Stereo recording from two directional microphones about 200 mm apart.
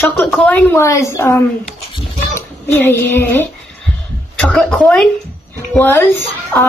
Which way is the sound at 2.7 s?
10° left (ahead or behind).